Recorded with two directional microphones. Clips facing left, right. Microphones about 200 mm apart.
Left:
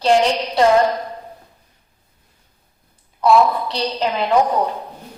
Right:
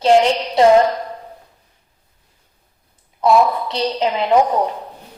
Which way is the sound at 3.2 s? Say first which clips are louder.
Even; 20° right (ahead or behind).